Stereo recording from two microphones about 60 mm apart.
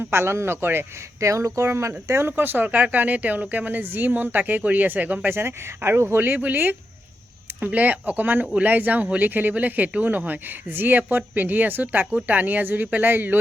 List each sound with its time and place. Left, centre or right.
0.0 s speech: right
1.2 s speech: right
5.3 s speech: right